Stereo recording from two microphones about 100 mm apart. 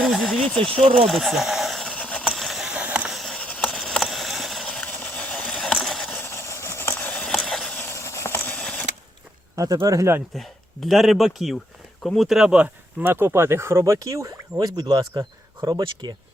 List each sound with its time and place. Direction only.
0.0 s speech: centre (ahead or behind)
1.9 s vehicle: 10° left (ahead or behind); by 3.1 s 15° right (ahead or behind)
3.1 s a sound: centre (ahead or behind)
4.9 s vehicle: 15° left (ahead or behind)
6.1 s a sound: 25° left (ahead or behind); by 7.7 s 5° left (ahead or behind)
7.8 s a sound: 25° left (ahead or behind); by 8.9 s 10° left (ahead or behind)
9.8 s speech: 35° right (ahead or behind)
10.3 s speech: centre (ahead or behind)
13.0 s speech: 20° right (ahead or behind); by 16.1 s 45° right (ahead or behind)